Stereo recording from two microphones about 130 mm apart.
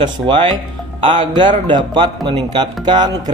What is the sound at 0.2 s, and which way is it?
Speech, 10° right (ahead or behind).